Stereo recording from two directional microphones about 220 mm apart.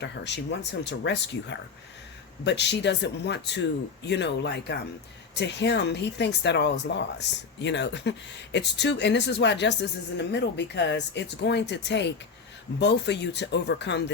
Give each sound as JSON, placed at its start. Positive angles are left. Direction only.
{"t": 0.0, "sound": "speech", "side_deg": 50}